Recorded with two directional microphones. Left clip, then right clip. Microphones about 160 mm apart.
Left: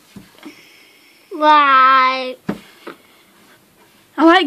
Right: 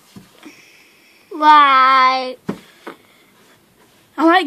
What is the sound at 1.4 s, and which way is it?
Speech, 30° right (ahead or behind).